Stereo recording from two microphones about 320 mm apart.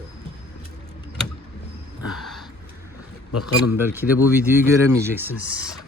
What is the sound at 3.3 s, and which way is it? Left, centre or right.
Speech, left.